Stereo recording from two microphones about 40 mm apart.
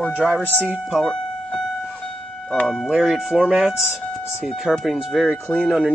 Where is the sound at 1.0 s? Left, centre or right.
Centre.